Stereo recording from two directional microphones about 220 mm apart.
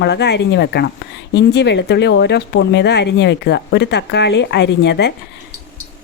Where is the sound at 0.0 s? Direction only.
50° left (ahead or behind).